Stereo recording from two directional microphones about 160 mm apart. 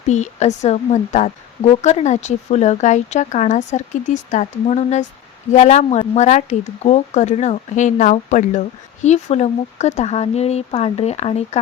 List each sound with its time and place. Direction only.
0.1 s speech: 45° left (ahead or behind)